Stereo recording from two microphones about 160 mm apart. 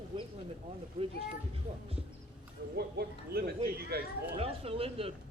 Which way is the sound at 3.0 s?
80° right.